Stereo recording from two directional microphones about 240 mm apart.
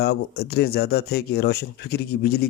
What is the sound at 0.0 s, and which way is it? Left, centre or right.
Speech, left.